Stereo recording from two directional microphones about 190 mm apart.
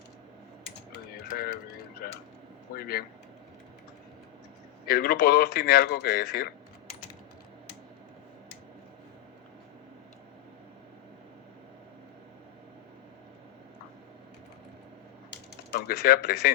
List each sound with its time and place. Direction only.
2.0 s a sound: 50° left (ahead or behind)
2.7 s speech: 50° left (ahead or behind)
4.9 s speech: 55° left (ahead or behind)
15.3 s typewriter: 55° left (ahead or behind)